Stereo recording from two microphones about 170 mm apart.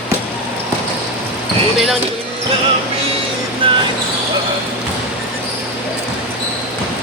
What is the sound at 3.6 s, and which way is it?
Basketball bounce, 30° right (ahead or behind).